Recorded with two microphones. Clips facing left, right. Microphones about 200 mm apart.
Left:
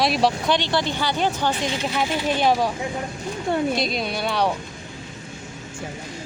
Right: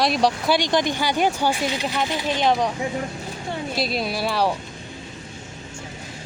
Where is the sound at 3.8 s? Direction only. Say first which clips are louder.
Even; 5° right (ahead or behind).